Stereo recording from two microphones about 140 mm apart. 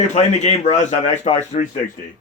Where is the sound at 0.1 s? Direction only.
50° left (ahead or behind).